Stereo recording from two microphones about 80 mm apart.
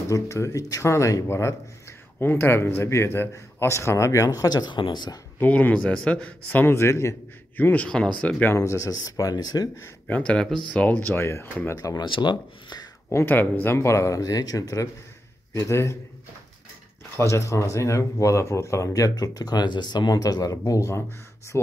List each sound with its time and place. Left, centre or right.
0.1 s speech: left
5.4 s a man's voice: centre
6.6 s speech: left
7.5 s a man's voice: left
8.5 s speech: left
10.0 s a man's voice: centre
12.0 s speech: left
13.1 s speech: left
13.7 s speech: left
17.2 s speech: left